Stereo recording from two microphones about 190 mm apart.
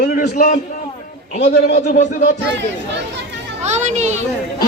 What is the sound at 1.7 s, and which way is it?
Music, 45° left (ahead or behind).